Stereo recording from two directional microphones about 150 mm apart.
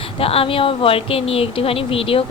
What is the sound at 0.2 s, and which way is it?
Speech, 40° left (ahead or behind).